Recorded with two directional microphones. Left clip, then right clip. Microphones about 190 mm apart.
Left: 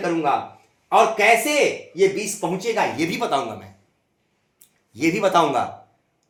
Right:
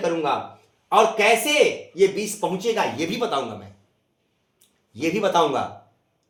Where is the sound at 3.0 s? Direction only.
25° left (ahead or behind).